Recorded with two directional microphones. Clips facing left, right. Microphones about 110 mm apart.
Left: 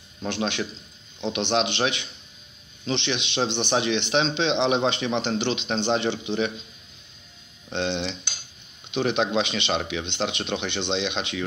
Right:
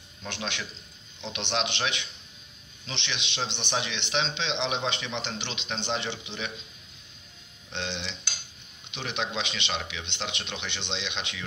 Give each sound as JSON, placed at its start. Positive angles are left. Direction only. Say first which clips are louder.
{"t": 0.2, "sound": "a man's voice", "louder": "left 8 dB", "side_deg": 40}
{"t": 7.7, "sound": "a man's voice", "louder": "left 8 dB", "side_deg": 45}